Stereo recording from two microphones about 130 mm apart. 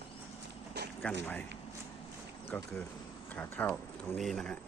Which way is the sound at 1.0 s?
10° left (ahead or behind).